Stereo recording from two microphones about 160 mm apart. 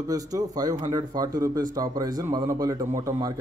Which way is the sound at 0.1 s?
25° right (ahead or behind).